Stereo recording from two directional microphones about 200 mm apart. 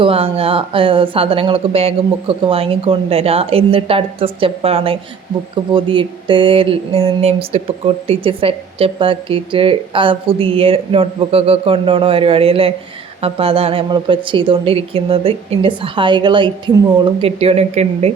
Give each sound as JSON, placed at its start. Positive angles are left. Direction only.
{"t": 0.0, "sound": "speech", "side_deg": -30}